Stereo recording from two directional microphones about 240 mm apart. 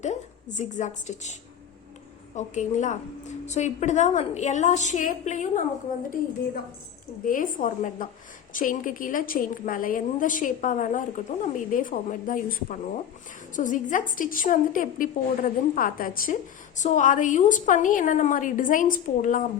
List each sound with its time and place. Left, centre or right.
0.5 s a woman's voice: left
7.3 s a woman's voice: left